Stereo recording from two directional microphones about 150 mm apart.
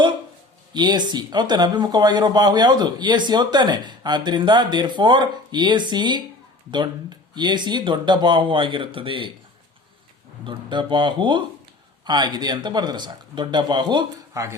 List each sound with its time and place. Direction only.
0.7 s speech: 30° right (ahead or behind)
7.3 s speech: 30° right (ahead or behind)
10.4 s speech: 30° right (ahead or behind)